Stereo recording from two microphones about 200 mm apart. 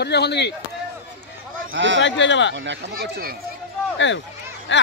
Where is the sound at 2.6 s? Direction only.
60° right (ahead or behind).